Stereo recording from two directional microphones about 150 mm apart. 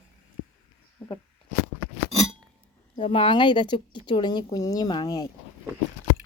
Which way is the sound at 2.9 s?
35° left (ahead or behind).